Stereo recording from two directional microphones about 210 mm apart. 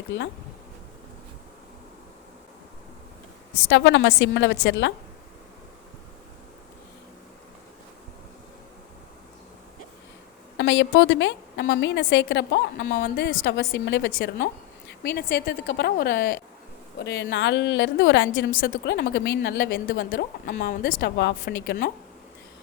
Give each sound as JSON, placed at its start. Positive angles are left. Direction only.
{"t": 3.7, "sound": "a woman's voice", "side_deg": 60}
{"t": 10.6, "sound": "a woman's voice", "side_deg": 60}